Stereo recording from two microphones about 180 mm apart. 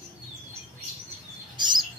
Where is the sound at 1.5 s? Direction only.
25° right (ahead or behind).